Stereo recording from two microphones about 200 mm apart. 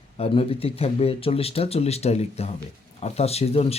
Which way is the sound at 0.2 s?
30° left (ahead or behind).